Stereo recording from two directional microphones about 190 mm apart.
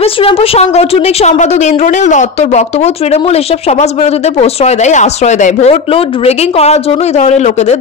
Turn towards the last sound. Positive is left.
turn(degrees=35)  # may be behind; listen again after turning